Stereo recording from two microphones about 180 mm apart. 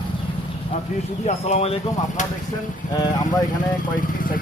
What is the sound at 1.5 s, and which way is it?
Speech, 35° left (ahead or behind).